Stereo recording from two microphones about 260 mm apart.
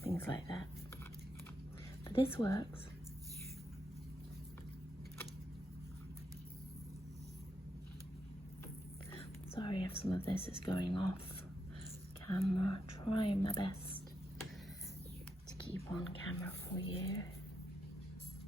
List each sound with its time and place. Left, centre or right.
0.0 s a sound: centre
2.0 s a sound: centre
2.3 s speech: centre
9.6 s speech: centre
12.3 s speech: centre
16.0 s speech: centre